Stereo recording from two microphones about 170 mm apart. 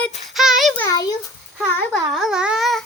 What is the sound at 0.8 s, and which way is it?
Speech, 20° left (ahead or behind).